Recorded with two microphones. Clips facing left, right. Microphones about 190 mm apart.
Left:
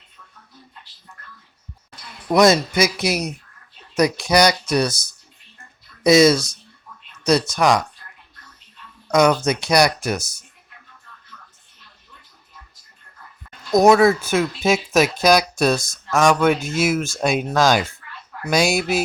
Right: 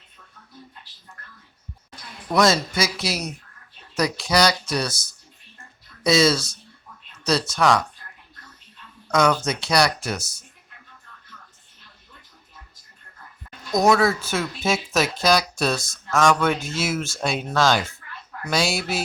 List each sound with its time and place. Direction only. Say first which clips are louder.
2.3 s speech: left 5 dB; 20° left (ahead or behind)
9.0 s speech: left 4 dB; 15° left (ahead or behind)
13.7 s speech: left 5 dB; 20° left (ahead or behind)